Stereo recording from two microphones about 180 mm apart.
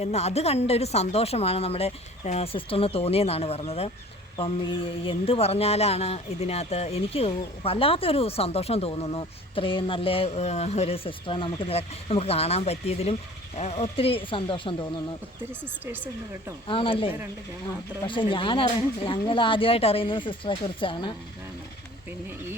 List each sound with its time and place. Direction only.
0.0 s speech: 35° left (ahead or behind)
16.6 s speech: 30° left (ahead or behind)